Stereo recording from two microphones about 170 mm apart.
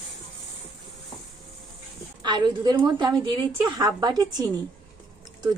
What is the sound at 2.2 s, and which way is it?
A woman's voice, 25° right (ahead or behind).